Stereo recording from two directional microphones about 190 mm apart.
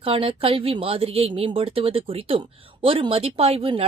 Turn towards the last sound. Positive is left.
turn(degrees=-30)  # may be behind; listen again after turning